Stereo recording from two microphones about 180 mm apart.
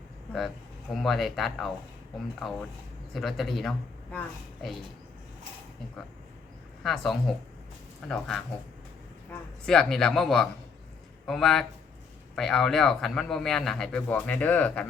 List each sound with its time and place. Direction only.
1.0 s a man's voice: centre (ahead or behind)
6.8 s a man's voice: centre (ahead or behind)
9.6 s a man's voice: 5° left (ahead or behind)